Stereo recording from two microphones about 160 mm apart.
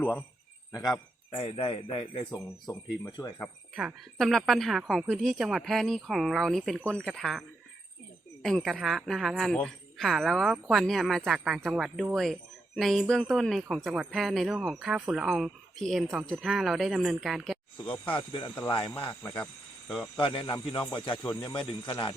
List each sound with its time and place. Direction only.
0.0 s speech: 15° left (ahead or behind)
1.3 s speech: 35° left (ahead or behind)
2.1 s speech: 20° left (ahead or behind)
3.8 s speech: centre (ahead or behind)
17.7 s speech: 30° left (ahead or behind)
20.1 s speech: 30° left (ahead or behind)